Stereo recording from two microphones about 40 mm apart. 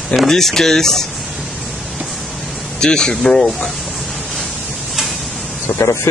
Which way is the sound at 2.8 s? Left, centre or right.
Centre.